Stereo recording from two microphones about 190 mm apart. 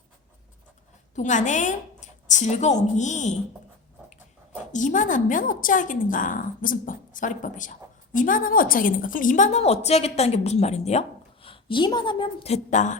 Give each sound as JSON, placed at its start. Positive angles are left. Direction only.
{"t": 1.1, "sound": "a woman's voice", "side_deg": 40}
{"t": 4.7, "sound": "a woman's voice", "side_deg": 40}